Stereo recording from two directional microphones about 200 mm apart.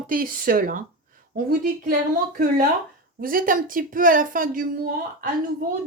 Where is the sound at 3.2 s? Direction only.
45° right (ahead or behind).